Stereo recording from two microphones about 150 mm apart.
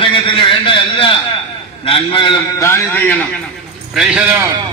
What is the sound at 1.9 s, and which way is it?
Speech, 35° left (ahead or behind).